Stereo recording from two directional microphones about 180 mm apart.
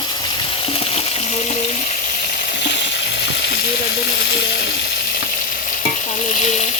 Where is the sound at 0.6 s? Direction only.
35° left (ahead or behind).